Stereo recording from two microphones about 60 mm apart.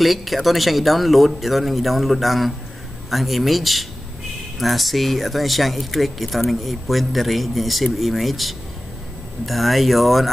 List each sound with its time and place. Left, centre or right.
0.0 s speech: centre